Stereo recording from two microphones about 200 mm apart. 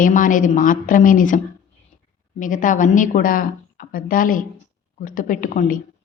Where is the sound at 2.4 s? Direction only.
40° left (ahead or behind).